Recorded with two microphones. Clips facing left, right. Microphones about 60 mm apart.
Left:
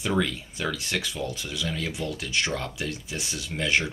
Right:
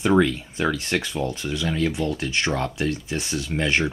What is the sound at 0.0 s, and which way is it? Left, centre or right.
Speech, right.